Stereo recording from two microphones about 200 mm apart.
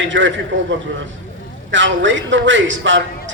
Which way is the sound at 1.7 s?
65° right (ahead or behind).